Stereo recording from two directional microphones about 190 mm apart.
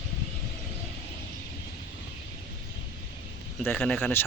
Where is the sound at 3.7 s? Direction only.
5° left (ahead or behind).